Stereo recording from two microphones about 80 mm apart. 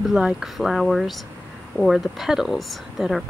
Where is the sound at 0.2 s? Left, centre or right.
Centre.